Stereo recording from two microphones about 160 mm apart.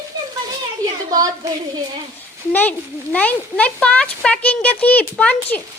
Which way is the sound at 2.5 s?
10° left (ahead or behind).